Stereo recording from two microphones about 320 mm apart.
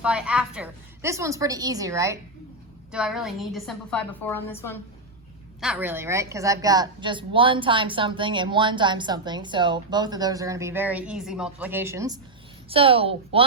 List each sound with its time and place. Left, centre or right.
0.0 s a woman's voice: centre